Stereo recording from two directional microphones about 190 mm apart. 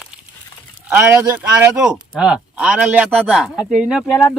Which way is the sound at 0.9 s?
10° right (ahead or behind).